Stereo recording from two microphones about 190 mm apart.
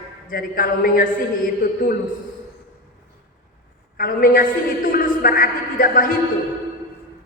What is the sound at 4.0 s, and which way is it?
A man's voice, 50° left (ahead or behind).